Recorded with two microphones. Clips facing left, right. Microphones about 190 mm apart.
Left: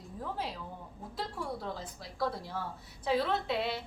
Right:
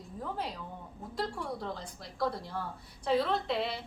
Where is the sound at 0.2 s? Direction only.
Centre (ahead or behind).